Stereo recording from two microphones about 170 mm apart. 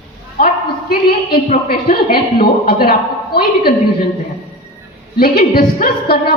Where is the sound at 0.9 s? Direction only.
60° left (ahead or behind).